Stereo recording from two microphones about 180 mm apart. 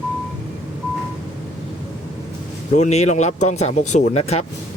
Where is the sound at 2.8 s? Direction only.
40° left (ahead or behind).